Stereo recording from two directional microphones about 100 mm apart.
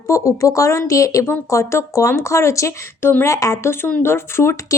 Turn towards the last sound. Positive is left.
turn(degrees=25)  # may be behind; listen again after turning